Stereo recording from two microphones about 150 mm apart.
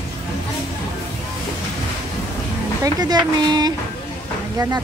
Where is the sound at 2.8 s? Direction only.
25° right (ahead or behind).